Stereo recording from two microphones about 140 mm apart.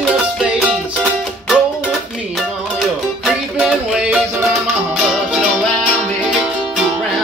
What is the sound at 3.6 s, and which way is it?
Music, 5° right (ahead or behind).